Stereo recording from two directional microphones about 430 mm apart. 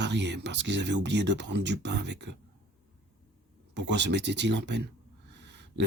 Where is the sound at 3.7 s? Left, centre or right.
Right.